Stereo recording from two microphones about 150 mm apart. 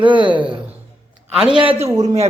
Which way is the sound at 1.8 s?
45° right (ahead or behind).